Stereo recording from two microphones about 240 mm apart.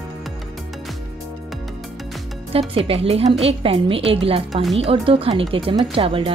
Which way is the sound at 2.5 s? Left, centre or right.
Right.